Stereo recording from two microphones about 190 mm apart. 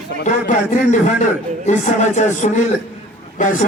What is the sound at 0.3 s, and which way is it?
A man's voice, 40° left (ahead or behind).